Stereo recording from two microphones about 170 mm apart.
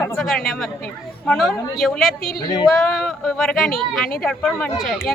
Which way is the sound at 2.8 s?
Centre (ahead or behind).